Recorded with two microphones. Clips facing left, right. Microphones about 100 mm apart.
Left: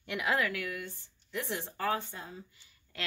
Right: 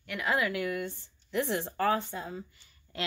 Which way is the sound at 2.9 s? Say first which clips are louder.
Right 4 dB; 25° right (ahead or behind).